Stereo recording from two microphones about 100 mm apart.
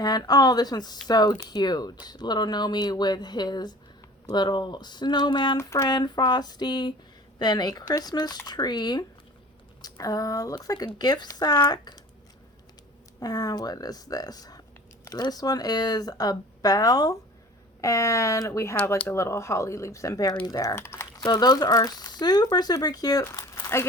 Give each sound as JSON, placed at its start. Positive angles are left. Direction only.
{"t": 0.0, "sound": "speech", "side_deg": 40}
{"t": 5.5, "sound": "speech", "side_deg": 30}
{"t": 5.9, "sound": "speech", "side_deg": 45}
{"t": 13.1, "sound": "speech", "side_deg": 40}
{"t": 21.4, "sound": "speech", "side_deg": 40}
{"t": 23.2, "sound": "crumpling", "side_deg": 30}